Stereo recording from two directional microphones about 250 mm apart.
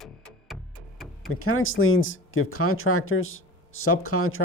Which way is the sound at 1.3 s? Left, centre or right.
Left.